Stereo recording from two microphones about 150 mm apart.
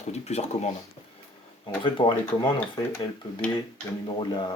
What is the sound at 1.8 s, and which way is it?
Speech, 35° left (ahead or behind).